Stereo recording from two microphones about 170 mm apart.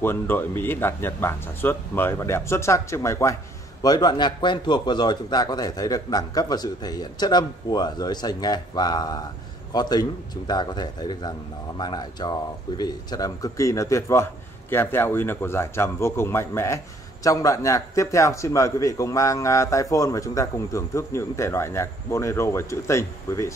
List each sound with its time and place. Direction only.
0.0 s a man's voice: 15° left (ahead or behind)